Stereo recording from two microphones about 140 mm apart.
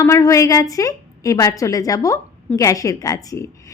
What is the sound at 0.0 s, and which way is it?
A woman's voice, 20° left (ahead or behind).